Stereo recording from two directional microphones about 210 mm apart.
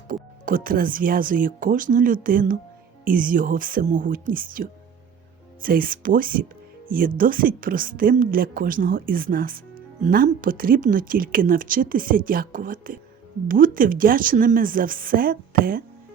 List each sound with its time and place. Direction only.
0.1 s a woman's voice: 40° right (ahead or behind)